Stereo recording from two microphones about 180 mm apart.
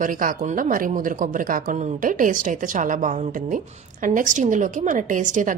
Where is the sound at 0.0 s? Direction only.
50° right (ahead or behind).